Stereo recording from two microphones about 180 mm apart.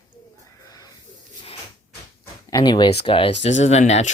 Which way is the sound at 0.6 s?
20° left (ahead or behind).